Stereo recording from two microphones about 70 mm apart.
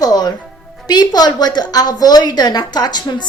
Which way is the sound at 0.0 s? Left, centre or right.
Left.